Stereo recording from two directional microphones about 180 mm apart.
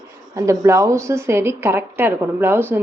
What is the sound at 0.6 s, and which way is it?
Speech, 15° right (ahead or behind).